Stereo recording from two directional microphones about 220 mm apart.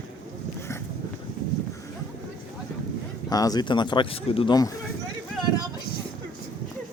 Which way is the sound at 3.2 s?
15° left (ahead or behind).